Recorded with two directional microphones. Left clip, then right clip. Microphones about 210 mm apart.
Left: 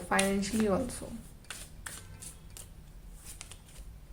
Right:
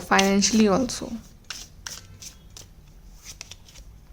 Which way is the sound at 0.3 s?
45° right (ahead or behind).